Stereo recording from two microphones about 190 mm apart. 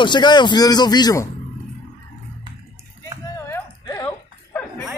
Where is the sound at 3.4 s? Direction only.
15° left (ahead or behind).